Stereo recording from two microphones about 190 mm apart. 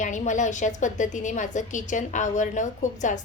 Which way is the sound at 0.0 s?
40° left (ahead or behind).